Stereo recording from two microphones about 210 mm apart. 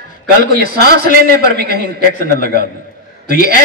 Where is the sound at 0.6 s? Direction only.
45° right (ahead or behind).